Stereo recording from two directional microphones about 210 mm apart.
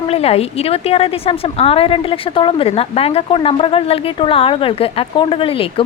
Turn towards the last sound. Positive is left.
turn(degrees=25)  # may be behind; listen again after turning